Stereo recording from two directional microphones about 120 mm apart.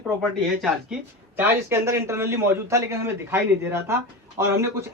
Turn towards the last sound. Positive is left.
turn(degrees=-25)  # may be behind; listen again after turning